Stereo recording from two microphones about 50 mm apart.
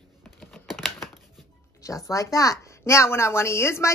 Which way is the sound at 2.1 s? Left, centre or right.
Left.